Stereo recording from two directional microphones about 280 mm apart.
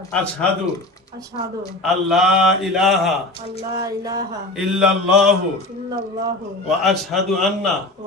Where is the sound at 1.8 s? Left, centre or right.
Centre.